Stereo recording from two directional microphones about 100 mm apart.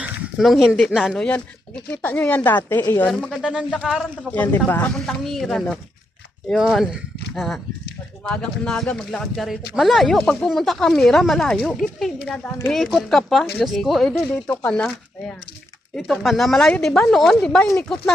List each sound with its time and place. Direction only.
0.0 s a sound: 5° right (ahead or behind)
0.9 s speech: 5° right (ahead or behind)
1.2 s speech: 10° left (ahead or behind)
3.1 s speech: 5° left (ahead or behind)
3.4 s speech: 10° right (ahead or behind)
4.3 s speech: 15° left (ahead or behind)
4.9 s speech: 5° left (ahead or behind)